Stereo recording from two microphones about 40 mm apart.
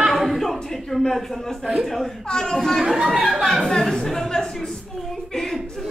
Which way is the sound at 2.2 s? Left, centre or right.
Centre.